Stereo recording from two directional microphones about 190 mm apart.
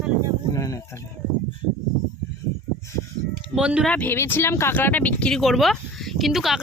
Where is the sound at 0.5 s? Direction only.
20° left (ahead or behind).